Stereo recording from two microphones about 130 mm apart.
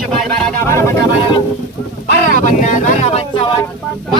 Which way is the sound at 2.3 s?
75° left (ahead or behind).